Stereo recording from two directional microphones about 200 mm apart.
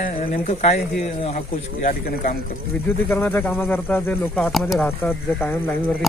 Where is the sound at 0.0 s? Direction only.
35° left (ahead or behind).